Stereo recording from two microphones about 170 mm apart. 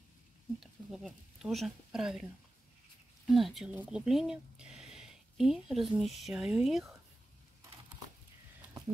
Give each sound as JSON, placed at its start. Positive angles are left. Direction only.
{"t": 0.6, "sound": "speech", "side_deg": 0}
{"t": 3.3, "sound": "speech", "side_deg": 0}